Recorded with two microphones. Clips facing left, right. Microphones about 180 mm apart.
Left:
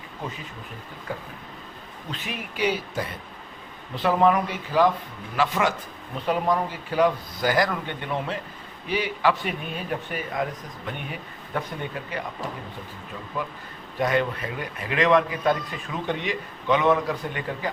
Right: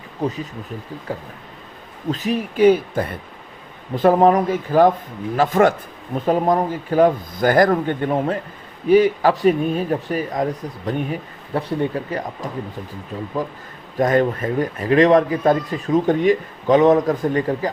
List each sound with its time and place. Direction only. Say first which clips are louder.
2.0 s speech: right 13 dB; 40° right (ahead or behind)